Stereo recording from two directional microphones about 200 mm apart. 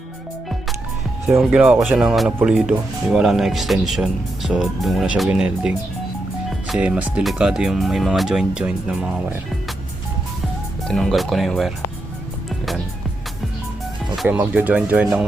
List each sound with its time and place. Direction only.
1.4 s speech: 5° right (ahead or behind)
10.8 s speech: 5° left (ahead or behind)
12.5 s music: centre (ahead or behind)
14.2 s speech: 5° right (ahead or behind)